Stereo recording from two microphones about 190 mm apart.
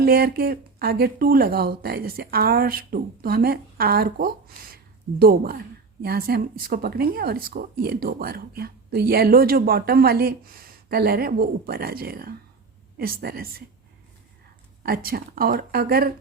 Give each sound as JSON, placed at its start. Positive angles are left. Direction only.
{"t": 0.0, "sound": "speech", "side_deg": -55}
{"t": 14.8, "sound": "speech", "side_deg": -50}